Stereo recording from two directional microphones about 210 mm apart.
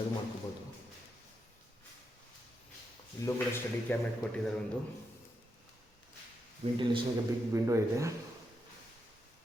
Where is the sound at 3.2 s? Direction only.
10° left (ahead or behind).